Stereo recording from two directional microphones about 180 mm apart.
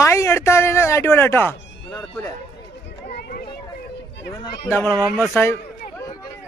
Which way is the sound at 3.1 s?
60° left (ahead or behind).